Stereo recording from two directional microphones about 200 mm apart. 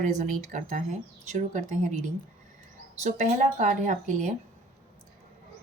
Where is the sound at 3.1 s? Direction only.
35° right (ahead or behind).